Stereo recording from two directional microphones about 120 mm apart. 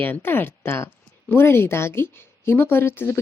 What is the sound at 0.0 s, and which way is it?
A woman's voice, 15° left (ahead or behind).